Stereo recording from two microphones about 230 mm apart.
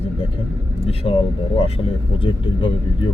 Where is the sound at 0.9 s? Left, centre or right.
Left.